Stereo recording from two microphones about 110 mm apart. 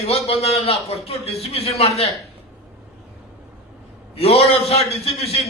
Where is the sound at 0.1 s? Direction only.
70° left (ahead or behind).